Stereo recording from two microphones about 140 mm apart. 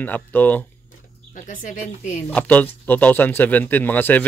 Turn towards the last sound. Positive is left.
turn(degrees=15)  # may be behind; listen again after turning